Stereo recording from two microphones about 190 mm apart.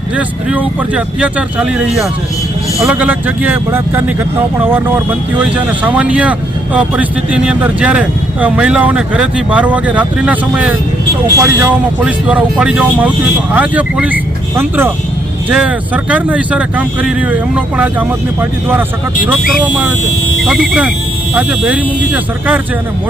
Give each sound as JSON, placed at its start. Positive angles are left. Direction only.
{"t": 0.2, "sound": "speech", "side_deg": -10}
{"t": 19.5, "sound": "speech", "side_deg": 0}